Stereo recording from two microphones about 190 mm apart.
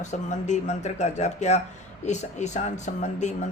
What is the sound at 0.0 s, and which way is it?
Speech, 40° left (ahead or behind).